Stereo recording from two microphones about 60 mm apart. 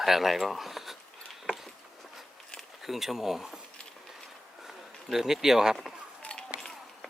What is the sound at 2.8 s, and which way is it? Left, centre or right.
Speech, centre.